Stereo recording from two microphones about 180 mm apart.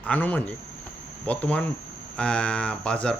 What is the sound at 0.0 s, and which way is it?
Speech, 10° left (ahead or behind).